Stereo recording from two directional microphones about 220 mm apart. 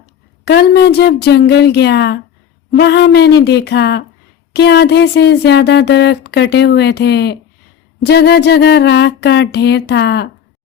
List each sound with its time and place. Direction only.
0.4 s speech: 50° left (ahead or behind)